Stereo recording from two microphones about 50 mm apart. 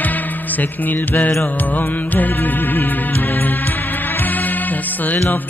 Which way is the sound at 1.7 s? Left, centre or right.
Left.